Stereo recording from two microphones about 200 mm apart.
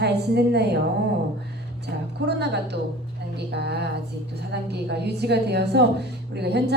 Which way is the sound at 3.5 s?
55° right (ahead or behind).